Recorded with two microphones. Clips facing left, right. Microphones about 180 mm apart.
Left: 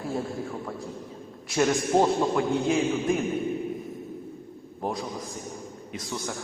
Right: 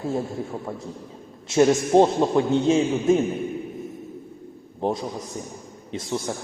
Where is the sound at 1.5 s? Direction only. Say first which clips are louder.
Right 6 dB; 25° right (ahead or behind).